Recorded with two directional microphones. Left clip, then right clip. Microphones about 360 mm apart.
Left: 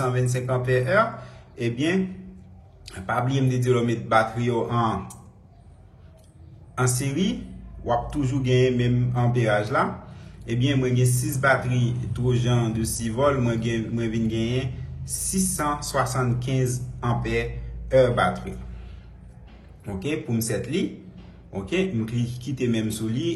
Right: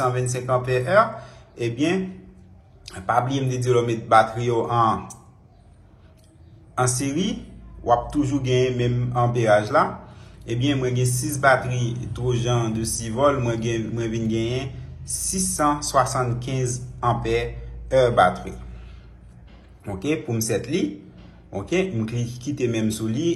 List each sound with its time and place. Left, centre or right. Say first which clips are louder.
0.1 s speech: right 3 dB; centre
6.7 s speech: right 3 dB; centre
19.8 s speech: right 3 dB; centre